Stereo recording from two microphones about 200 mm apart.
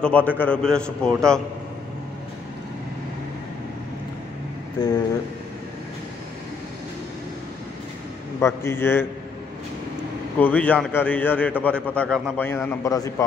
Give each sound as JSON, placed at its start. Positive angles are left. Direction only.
{"t": 0.0, "sound": "a man's voice", "side_deg": 5}
{"t": 4.7, "sound": "speech", "side_deg": 20}
{"t": 8.4, "sound": "a man's voice", "side_deg": 15}
{"t": 10.4, "sound": "a man's voice", "side_deg": 5}